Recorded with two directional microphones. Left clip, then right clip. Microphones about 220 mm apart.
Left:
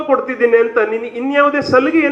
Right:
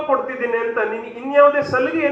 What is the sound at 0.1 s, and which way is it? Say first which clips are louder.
A man's voice: left 8 dB; 55° left (ahead or behind).